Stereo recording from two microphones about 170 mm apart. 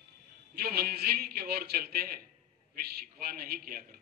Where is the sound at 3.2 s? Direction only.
65° right (ahead or behind).